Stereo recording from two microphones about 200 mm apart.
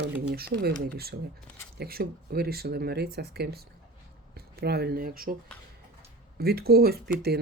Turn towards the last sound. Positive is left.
turn(degrees=-50)  # may be behind; listen again after turning